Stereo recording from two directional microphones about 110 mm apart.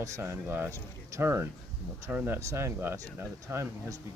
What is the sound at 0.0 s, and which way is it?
Speech, 25° right (ahead or behind).